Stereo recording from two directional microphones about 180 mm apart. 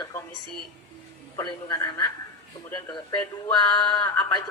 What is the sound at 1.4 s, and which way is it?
A woman's voice, 20° left (ahead or behind).